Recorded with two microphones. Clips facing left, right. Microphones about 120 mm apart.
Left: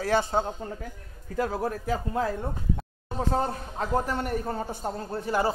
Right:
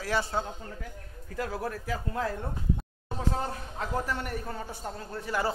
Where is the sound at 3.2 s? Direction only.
35° left (ahead or behind).